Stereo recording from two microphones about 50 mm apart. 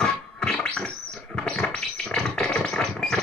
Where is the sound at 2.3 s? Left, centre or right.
Centre.